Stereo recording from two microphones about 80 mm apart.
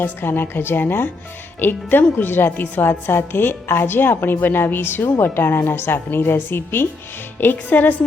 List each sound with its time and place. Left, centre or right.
0.0 s speech: left